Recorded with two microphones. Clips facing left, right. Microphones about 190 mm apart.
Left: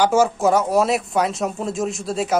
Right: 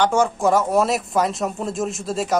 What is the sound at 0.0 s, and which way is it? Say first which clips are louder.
Speech: left 2 dB; 5° left (ahead or behind).